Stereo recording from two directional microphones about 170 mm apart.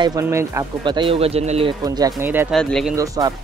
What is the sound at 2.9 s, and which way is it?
Speech, 20° right (ahead or behind).